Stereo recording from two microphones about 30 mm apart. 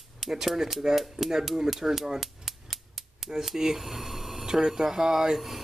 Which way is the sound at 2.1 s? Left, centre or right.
Centre.